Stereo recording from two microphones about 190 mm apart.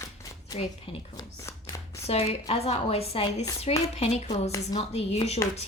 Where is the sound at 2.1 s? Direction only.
30° left (ahead or behind).